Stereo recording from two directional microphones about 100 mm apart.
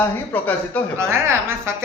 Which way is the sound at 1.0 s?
25° right (ahead or behind).